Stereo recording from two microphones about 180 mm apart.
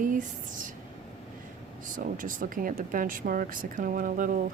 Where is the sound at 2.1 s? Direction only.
50° right (ahead or behind).